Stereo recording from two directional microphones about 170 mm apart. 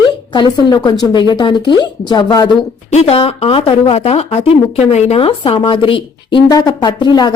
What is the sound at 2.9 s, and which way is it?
Speech, 35° left (ahead or behind).